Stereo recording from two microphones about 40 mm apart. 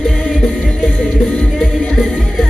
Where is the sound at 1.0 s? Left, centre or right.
Left.